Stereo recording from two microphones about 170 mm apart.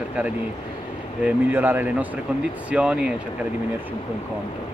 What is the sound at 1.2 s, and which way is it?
Speech, 10° right (ahead or behind).